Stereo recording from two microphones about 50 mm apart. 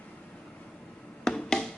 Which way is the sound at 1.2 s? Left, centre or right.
Centre.